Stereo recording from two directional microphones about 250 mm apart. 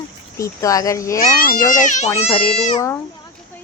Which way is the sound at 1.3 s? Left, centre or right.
Left.